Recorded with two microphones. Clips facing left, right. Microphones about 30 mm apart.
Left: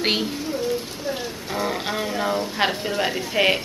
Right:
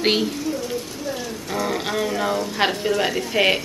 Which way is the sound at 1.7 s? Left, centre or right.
Centre.